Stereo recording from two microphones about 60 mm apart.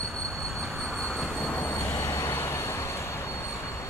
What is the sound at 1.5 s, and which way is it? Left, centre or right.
Train, left.